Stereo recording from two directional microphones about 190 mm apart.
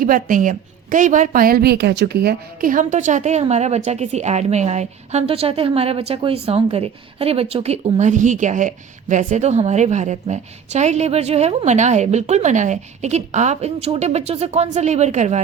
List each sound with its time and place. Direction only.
0.0 s a woman's voice: 45° right (ahead or behind)